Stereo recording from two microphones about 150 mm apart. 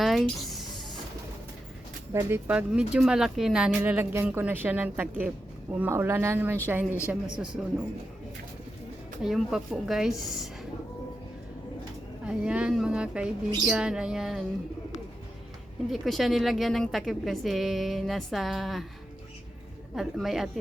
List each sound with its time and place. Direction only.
0.0 s music: centre (ahead or behind)
2.1 s a woman's voice: 15° right (ahead or behind)
9.2 s a woman's voice: centre (ahead or behind)
12.2 s a woman's voice: 5° right (ahead or behind)
15.9 s a woman's voice: centre (ahead or behind)
20.0 s a woman's voice: centre (ahead or behind)